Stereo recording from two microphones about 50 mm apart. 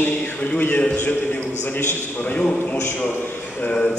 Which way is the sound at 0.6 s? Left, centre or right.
Left.